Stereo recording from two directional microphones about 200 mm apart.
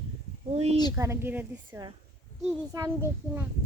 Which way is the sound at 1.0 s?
10° right (ahead or behind).